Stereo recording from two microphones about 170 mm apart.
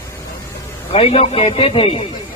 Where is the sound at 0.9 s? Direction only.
35° left (ahead or behind).